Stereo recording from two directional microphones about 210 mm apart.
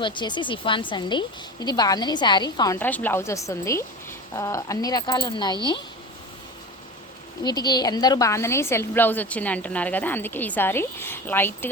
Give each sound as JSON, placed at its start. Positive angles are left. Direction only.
{"t": 0.0, "sound": "a woman's voice", "side_deg": 20}
{"t": 7.4, "sound": "a woman's voice", "side_deg": 20}